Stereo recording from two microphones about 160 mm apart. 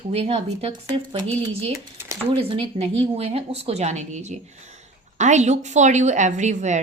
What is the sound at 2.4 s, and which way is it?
A woman's voice, 35° right (ahead or behind).